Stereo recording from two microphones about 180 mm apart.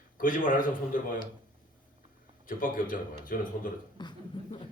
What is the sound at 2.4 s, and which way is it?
Speech, 50° left (ahead or behind).